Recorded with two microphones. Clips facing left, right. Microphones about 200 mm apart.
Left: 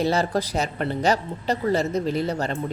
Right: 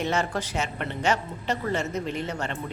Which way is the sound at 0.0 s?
35° left (ahead or behind).